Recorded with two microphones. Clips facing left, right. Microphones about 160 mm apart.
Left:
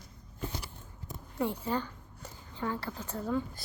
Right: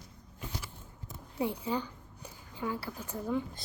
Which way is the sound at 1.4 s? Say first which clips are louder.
Left 1 dB; 15° right (ahead or behind).